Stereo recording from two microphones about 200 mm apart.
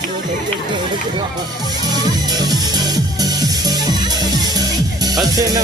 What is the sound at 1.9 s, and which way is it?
Music, 20° right (ahead or behind).